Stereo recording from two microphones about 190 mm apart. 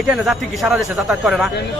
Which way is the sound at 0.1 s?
Centre (ahead or behind).